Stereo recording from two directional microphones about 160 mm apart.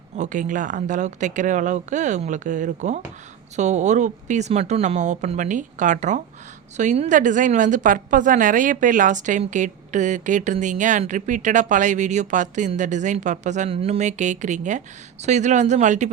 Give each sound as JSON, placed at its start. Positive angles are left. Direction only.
{"t": 0.2, "sound": "a woman's voice", "side_deg": -50}